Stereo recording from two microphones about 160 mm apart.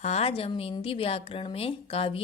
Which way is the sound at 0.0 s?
40° left (ahead or behind).